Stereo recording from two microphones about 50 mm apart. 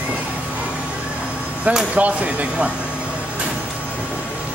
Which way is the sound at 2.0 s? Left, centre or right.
Right.